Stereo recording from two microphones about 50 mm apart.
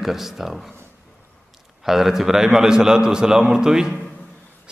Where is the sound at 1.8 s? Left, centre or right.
Centre.